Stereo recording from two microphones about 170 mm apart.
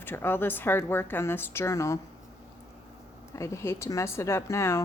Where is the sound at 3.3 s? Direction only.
15° left (ahead or behind).